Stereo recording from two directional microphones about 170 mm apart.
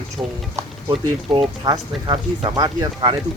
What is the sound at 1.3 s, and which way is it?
Speech, 30° right (ahead or behind).